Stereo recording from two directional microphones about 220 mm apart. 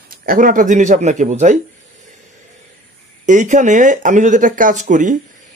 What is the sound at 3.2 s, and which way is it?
Speech, 35° right (ahead or behind).